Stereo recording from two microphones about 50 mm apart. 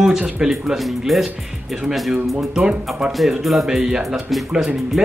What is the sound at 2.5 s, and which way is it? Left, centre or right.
Speech, centre.